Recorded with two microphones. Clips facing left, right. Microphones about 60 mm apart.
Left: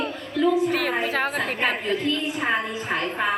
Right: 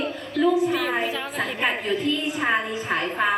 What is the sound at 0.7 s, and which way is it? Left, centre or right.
Speech, left.